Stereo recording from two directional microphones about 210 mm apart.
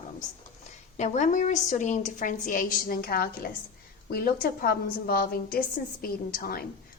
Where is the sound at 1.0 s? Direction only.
35° left (ahead or behind).